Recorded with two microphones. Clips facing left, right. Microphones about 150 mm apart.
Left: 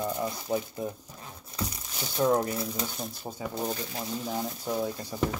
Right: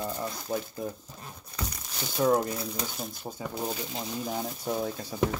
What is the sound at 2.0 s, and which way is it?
Speech, centre (ahead or behind).